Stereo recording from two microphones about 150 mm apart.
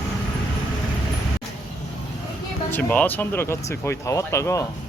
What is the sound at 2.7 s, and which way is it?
Speech, 15° left (ahead or behind).